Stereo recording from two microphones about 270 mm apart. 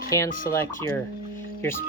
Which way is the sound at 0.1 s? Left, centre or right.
Centre.